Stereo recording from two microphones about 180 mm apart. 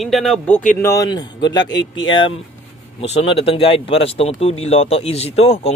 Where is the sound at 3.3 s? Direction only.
30° left (ahead or behind).